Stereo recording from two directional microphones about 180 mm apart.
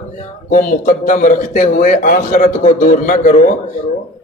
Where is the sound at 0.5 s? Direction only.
45° left (ahead or behind).